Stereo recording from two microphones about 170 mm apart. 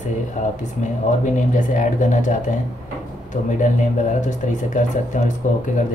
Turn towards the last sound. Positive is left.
turn(degrees=45)  # may be behind; listen again after turning